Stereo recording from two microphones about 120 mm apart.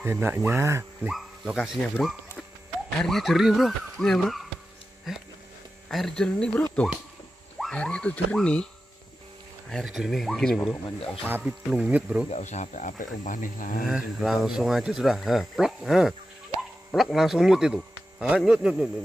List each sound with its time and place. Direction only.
0.0 s speech: 20° right (ahead or behind)
1.0 s speech: 5° right (ahead or behind)
5.9 s speech: centre (ahead or behind)
9.7 s speech: centre (ahead or behind)
11.2 s speech: 10° right (ahead or behind)
12.3 s speech: 70° left (ahead or behind); by 13.7 s 90° left
13.8 s speech: 5° right (ahead or behind)